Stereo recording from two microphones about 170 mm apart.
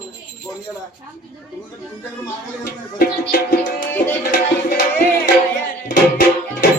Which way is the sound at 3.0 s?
60° left (ahead or behind).